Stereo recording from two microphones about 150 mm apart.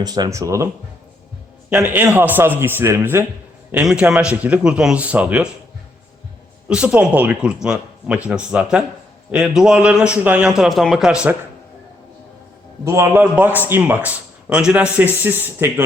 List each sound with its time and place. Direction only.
0.0 s speech: 25° right (ahead or behind)
1.7 s a man's voice: 10° right (ahead or behind)
6.7 s a man's voice: 5° right (ahead or behind)
12.8 s a man's voice: 20° right (ahead or behind)